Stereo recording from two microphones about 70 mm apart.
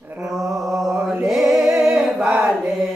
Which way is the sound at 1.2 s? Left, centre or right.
Centre.